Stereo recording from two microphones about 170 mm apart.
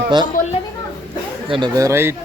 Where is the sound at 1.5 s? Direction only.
25° right (ahead or behind).